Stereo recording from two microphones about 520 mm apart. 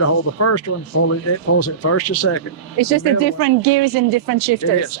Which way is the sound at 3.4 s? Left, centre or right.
Right.